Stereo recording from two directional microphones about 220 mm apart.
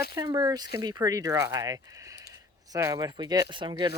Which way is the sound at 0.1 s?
20° right (ahead or behind).